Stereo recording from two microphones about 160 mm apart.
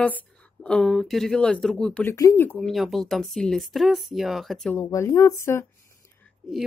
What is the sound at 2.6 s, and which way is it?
Speech, centre (ahead or behind).